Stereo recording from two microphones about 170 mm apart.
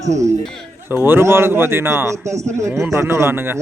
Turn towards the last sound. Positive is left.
turn(degrees=-15)  # may be behind; listen again after turning